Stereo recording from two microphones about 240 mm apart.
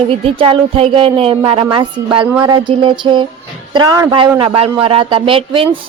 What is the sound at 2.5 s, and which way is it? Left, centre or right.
A man's voice, centre.